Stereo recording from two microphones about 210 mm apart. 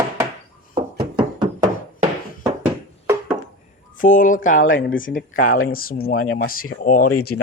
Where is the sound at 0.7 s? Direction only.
25° right (ahead or behind).